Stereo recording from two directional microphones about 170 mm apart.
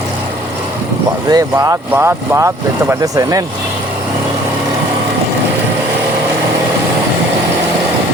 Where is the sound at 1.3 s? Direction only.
20° right (ahead or behind).